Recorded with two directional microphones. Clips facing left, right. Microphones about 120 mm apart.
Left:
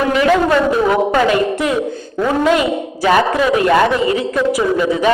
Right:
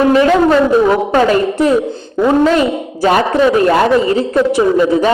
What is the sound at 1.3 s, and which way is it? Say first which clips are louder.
A man's voice: right 4 dB; 35° right (ahead or behind).